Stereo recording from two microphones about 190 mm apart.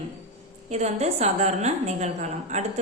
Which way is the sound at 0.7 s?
35° right (ahead or behind).